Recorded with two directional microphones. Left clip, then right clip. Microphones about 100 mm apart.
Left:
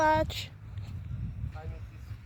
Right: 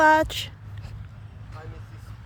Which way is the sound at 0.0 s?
90° right.